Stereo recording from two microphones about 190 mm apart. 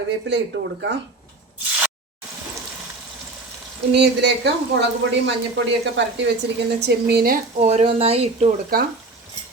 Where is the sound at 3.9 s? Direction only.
65° right (ahead or behind).